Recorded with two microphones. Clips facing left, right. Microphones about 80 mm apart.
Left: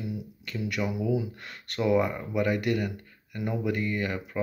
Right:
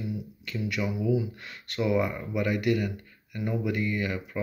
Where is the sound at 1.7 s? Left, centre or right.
Left.